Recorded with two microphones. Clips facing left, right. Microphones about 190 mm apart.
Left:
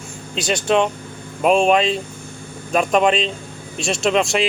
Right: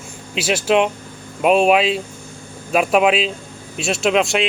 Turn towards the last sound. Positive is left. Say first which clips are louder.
# right 1 dB
turn(degrees=0)  # may be behind; listen again after turning